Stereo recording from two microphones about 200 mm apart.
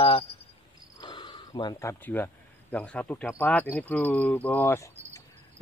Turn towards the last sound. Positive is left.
turn(degrees=15)  # may be behind; listen again after turning